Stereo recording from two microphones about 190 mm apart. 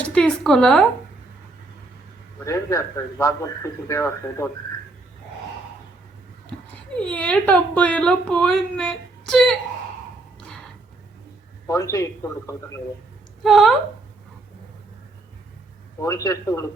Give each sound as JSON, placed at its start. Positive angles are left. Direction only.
{"t": 0.1, "sound": "a sound", "side_deg": 5}
{"t": 2.4, "sound": "a man's voice", "side_deg": 15}
{"t": 6.9, "sound": "a woman's voice", "side_deg": 5}
{"t": 11.6, "sound": "a man's voice", "side_deg": 15}
{"t": 13.4, "sound": "a woman's voice", "side_deg": 0}
{"t": 16.0, "sound": "a man's voice", "side_deg": 15}